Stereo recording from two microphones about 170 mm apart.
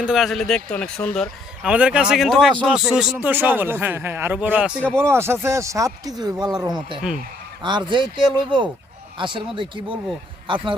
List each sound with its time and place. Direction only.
0.0 s a man's voice: centre (ahead or behind)
1.7 s speech: 5° right (ahead or behind)
4.8 s speech: 5° left (ahead or behind)
5.1 s a man's voice: 15° right (ahead or behind)